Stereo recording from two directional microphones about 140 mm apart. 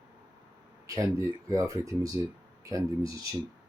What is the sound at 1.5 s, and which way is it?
Speech, 25° right (ahead or behind).